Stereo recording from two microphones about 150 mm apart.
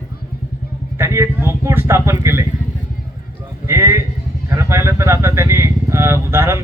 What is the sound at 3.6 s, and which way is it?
A man's voice, 15° right (ahead or behind).